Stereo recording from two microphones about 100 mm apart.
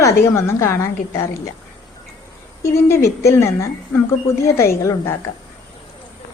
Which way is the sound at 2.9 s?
30° left (ahead or behind).